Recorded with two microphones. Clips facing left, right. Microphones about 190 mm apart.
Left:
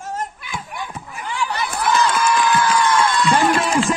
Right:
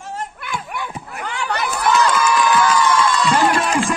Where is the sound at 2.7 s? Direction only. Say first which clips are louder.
Even; 55° left (ahead or behind).